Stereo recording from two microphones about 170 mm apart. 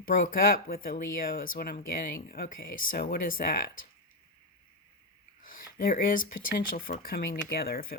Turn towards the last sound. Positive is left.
turn(degrees=60)  # may be behind; listen again after turning